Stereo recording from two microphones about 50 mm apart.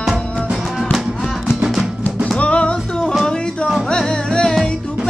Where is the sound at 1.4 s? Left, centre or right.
Centre.